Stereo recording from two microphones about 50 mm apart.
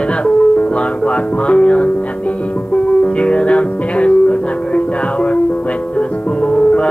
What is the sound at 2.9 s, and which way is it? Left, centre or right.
Music, left.